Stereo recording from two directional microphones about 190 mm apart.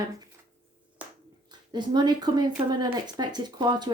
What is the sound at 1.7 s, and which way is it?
Speech, 25° right (ahead or behind).